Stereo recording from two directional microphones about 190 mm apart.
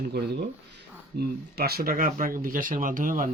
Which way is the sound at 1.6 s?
55° right (ahead or behind).